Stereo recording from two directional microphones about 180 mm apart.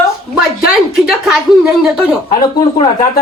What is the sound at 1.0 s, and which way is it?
Speech, 5° right (ahead or behind).